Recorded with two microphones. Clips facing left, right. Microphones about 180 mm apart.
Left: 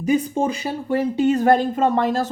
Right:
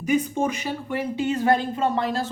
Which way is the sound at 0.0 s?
35° left (ahead or behind).